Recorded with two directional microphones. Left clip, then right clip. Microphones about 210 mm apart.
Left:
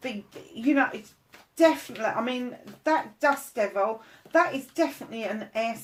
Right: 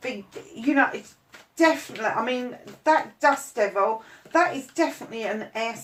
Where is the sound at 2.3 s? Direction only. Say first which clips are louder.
Right 4 dB; 35° left (ahead or behind).